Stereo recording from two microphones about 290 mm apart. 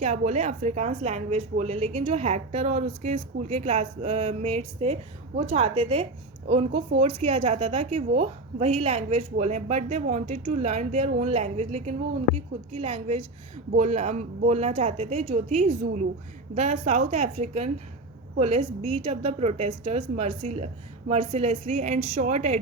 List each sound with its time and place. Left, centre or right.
0.0 s a woman's voice: right